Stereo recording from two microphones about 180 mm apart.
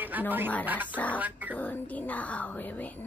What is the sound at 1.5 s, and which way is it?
Speech, 10° left (ahead or behind).